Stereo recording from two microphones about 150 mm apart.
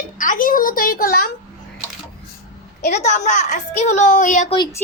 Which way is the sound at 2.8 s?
50° left (ahead or behind).